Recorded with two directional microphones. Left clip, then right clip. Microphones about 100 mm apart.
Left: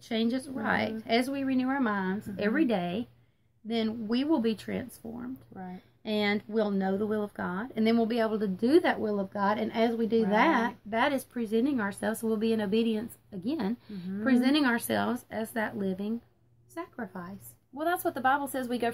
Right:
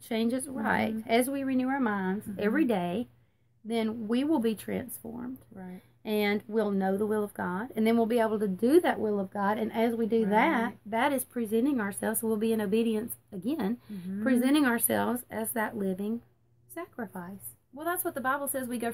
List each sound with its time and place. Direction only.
0.0 s a woman's voice: 40° right (ahead or behind)
17.7 s a woman's voice: 30° left (ahead or behind)